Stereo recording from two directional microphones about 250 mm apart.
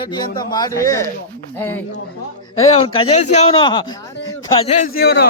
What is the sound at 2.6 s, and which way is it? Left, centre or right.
A man's voice, left.